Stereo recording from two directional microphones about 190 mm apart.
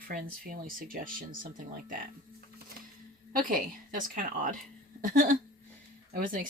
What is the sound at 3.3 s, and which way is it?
Speech, 45° right (ahead or behind).